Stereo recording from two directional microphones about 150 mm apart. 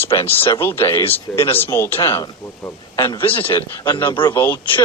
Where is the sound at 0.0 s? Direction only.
15° left (ahead or behind).